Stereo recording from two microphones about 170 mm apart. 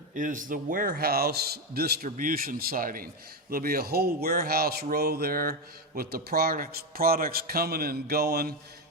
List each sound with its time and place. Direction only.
0.1 s speech: 50° right (ahead or behind); by 8.5 s 70° right (ahead or behind)